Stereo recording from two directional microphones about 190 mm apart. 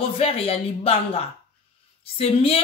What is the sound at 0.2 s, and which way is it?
Speech, 30° left (ahead or behind).